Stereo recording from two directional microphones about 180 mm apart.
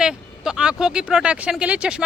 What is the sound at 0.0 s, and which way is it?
A woman's voice, 5° right (ahead or behind).